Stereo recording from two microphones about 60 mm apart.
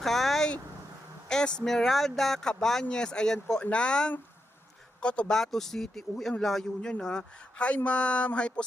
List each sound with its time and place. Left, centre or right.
0.0 s vehicle: centre
1.3 s speech: centre
5.3 s speech: centre